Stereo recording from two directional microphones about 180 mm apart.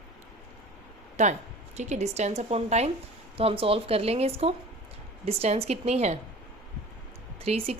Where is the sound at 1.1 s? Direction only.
40° right (ahead or behind).